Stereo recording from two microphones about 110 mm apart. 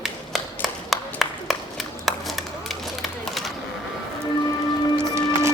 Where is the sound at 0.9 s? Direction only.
Centre (ahead or behind).